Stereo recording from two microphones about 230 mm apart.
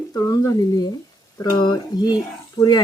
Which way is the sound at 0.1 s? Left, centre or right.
Centre.